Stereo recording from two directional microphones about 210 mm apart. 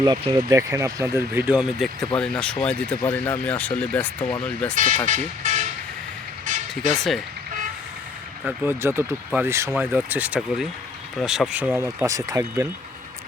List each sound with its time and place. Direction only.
0.0 s speech: 20° right (ahead or behind); by 4.4 s 10° left (ahead or behind)
4.7 s speech: 40° right (ahead or behind)
6.4 s vehicle: 35° right (ahead or behind)
6.9 s speech: centre (ahead or behind)
8.4 s speech: 10° right (ahead or behind)